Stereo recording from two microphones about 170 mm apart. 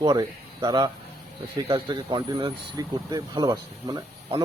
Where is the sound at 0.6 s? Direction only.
30° right (ahead or behind).